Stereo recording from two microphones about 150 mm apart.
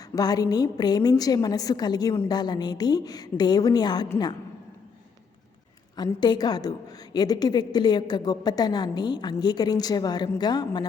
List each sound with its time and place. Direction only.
0.0 s a woman's voice: 25° left (ahead or behind)
6.0 s a woman's voice: 30° left (ahead or behind)